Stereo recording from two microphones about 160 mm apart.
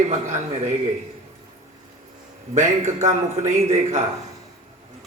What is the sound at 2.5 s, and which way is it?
A man's voice, 45° right (ahead or behind).